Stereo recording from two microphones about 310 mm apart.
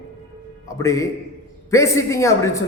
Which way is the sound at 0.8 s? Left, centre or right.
Centre.